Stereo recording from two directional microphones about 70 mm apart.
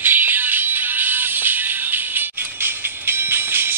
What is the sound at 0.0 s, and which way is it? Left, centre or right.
Music, right.